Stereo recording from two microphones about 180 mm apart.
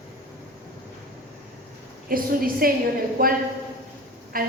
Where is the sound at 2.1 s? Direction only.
50° right (ahead or behind).